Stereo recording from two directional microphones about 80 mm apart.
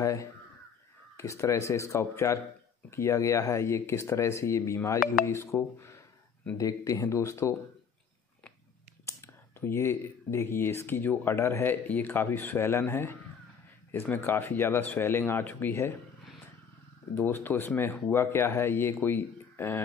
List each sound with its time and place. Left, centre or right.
0.0 s caw: left
1.1 s speech: left
9.0 s speech: left
14.1 s speech: left
17.1 s speech: left